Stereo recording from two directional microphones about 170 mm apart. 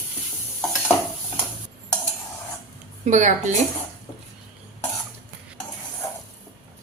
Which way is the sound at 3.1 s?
45° right (ahead or behind).